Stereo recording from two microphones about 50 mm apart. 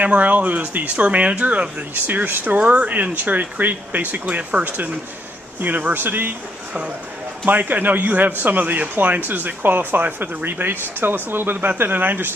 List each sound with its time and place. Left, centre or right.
0.0 s speech: right
7.4 s speech: right